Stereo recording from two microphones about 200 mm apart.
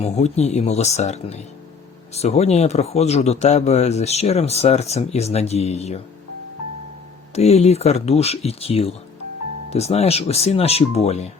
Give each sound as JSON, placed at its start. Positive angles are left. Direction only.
{"t": 0.0, "sound": "speech", "side_deg": 35}
{"t": 7.3, "sound": "speech", "side_deg": 30}